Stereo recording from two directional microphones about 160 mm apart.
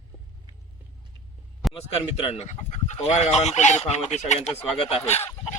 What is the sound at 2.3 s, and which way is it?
Speech, 45° left (ahead or behind).